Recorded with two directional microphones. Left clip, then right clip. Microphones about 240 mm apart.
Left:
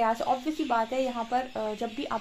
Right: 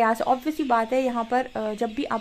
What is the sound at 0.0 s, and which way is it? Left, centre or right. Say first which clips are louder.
A woman's voice: right 5 dB; right.